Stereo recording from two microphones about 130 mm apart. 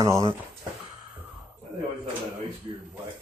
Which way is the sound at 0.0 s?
25° right (ahead or behind).